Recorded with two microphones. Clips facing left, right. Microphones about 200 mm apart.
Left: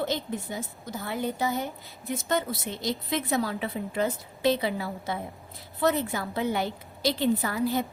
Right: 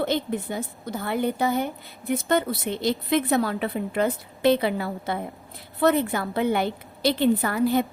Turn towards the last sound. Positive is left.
turn(degrees=-60)  # may be behind; listen again after turning